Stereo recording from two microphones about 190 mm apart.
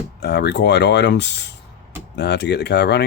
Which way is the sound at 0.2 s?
60° left (ahead or behind).